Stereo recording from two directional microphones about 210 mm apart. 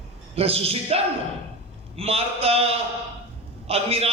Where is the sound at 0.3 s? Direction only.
30° right (ahead or behind).